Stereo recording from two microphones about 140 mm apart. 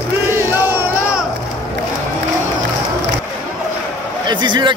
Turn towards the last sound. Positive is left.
turn(degrees=-35)  # may be behind; listen again after turning